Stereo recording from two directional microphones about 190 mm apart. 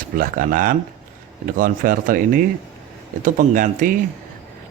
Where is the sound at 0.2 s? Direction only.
45° right (ahead or behind).